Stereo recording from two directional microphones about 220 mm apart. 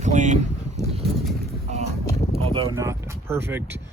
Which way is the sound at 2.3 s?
25° right (ahead or behind).